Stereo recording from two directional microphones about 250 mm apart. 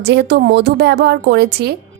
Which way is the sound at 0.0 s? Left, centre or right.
Right.